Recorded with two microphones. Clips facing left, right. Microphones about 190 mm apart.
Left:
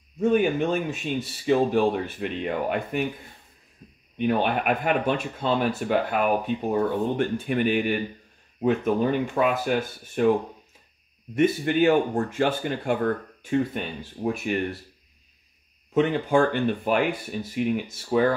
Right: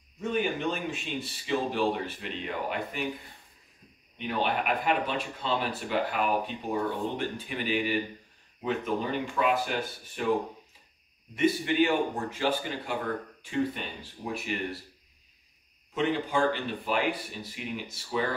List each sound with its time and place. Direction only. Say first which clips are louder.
0.2 s speech: left 8 dB; 50° left (ahead or behind)
4.2 s speech: left 6 dB; 55° left (ahead or behind)
11.3 s speech: left 4 dB; 50° left (ahead or behind)
15.9 s speech: left 7 dB; 50° left (ahead or behind)